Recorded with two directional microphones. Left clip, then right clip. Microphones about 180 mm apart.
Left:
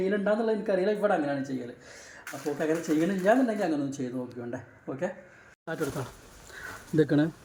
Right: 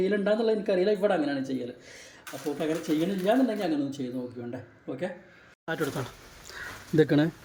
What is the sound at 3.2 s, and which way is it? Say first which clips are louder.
Speech: left 1 dB; 5° left (ahead or behind).